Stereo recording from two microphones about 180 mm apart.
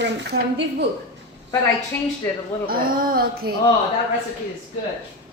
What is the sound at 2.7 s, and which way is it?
Speech, 55° right (ahead or behind).